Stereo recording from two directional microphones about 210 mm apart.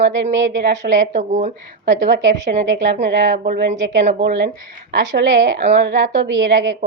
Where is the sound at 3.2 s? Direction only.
40° right (ahead or behind).